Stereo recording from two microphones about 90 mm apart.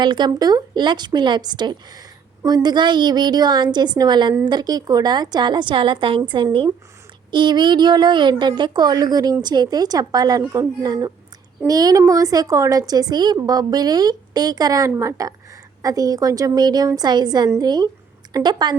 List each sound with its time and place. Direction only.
0.0 s a woman's voice: 60° right (ahead or behind)
0.3 s a woman's voice: 45° right (ahead or behind)